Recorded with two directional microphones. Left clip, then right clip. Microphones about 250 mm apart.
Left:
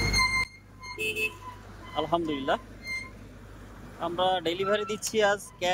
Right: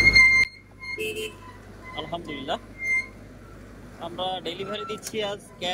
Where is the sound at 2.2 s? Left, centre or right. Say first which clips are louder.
Left 2 dB; centre.